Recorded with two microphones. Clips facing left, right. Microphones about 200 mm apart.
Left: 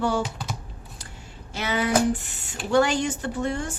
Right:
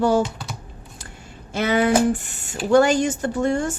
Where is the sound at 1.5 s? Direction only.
55° right (ahead or behind).